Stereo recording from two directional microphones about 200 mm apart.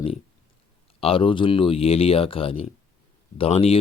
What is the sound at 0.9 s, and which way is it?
Speech, 30° left (ahead or behind).